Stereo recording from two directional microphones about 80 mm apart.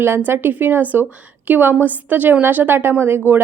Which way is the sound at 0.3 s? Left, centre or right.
Right.